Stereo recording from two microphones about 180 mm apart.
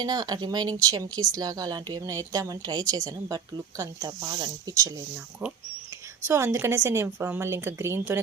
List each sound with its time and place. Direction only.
0.0 s a woman's voice: 25° right (ahead or behind)